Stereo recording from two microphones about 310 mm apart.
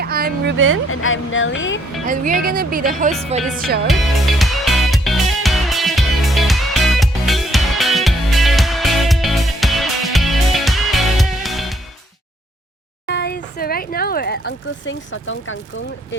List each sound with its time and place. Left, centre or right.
0.0 s speech: right
0.9 s speech: left
2.0 s speech: right
3.8 s music: centre
13.1 s a sound: left